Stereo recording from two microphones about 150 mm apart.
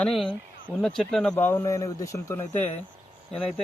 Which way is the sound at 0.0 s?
Centre (ahead or behind).